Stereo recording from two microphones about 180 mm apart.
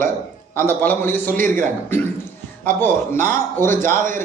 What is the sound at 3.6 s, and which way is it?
Speech, 15° left (ahead or behind).